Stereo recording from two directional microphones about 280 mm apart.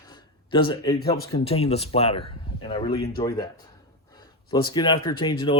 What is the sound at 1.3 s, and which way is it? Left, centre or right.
A man's voice, left.